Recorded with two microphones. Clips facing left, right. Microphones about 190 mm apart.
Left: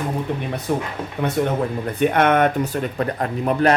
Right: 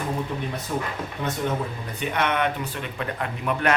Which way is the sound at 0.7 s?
60° left (ahead or behind).